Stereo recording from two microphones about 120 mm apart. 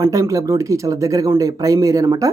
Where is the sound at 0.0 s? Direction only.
25° right (ahead or behind).